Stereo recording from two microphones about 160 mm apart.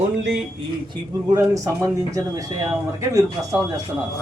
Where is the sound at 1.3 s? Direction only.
20° right (ahead or behind).